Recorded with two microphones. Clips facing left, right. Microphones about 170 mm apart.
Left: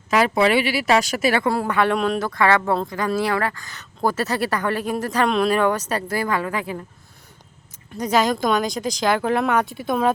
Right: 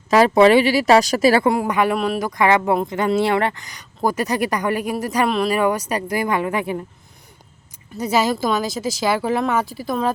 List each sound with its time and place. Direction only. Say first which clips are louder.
0.1 s speech: right 5 dB; 40° right (ahead or behind)
1.5 s speech: right 2 dB; 15° right (ahead or behind)
7.9 s speech: even; 10° right (ahead or behind)